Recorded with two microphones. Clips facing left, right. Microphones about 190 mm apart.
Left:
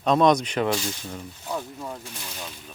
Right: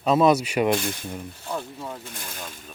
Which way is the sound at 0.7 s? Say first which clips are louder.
Right 3 dB; 55° right (ahead or behind).